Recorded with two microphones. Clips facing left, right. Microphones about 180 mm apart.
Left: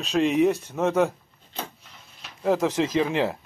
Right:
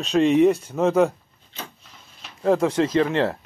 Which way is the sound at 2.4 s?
Centre (ahead or behind).